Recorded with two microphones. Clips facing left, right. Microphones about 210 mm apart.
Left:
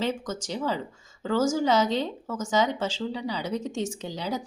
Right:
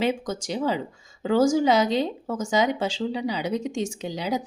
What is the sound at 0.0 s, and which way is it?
A woman's voice, 15° right (ahead or behind).